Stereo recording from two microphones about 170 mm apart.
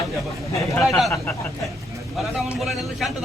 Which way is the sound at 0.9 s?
Centre (ahead or behind).